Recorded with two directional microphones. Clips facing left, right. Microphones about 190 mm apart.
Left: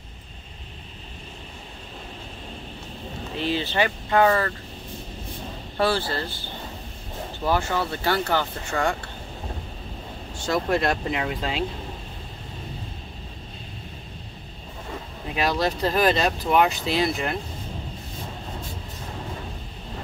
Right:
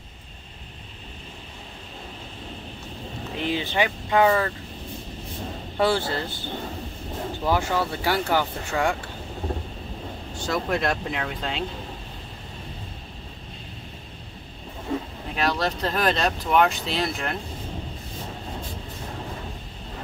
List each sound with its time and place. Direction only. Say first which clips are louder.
3.3 s vehicle: left 1 dB; 15° right (ahead or behind)
5.8 s speech: right 1 dB; 20° right (ahead or behind)
7.5 s speech: even; 10° right (ahead or behind)
10.4 s speech: left 2 dB; centre (ahead or behind)
15.3 s speech: left 1 dB; 5° left (ahead or behind)